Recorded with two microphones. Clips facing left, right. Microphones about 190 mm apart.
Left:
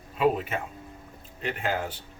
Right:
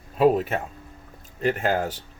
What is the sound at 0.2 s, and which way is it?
Speech, 40° right (ahead or behind).